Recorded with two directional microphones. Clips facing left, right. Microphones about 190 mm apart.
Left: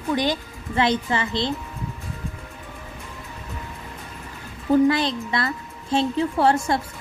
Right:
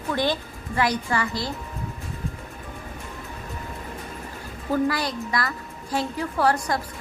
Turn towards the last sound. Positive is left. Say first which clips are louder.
# left 3 dB
turn(degrees=25)  # may be behind; listen again after turning